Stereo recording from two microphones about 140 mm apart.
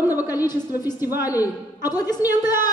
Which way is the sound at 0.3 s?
25° left (ahead or behind).